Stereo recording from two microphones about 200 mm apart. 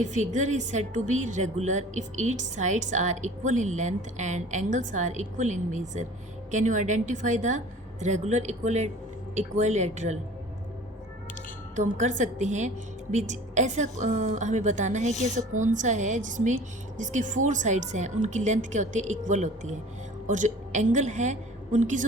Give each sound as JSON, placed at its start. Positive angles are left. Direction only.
{"t": 0.0, "sound": "a woman's voice", "side_deg": -35}
{"t": 11.8, "sound": "a woman's voice", "side_deg": -35}